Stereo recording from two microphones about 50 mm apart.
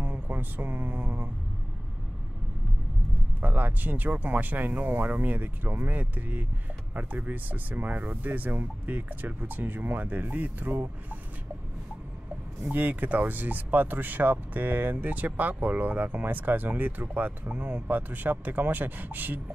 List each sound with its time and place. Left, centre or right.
0.0 s speech: right
3.3 s speech: right
12.6 s speech: right